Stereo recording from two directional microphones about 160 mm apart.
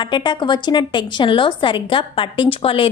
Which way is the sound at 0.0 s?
30° left (ahead or behind).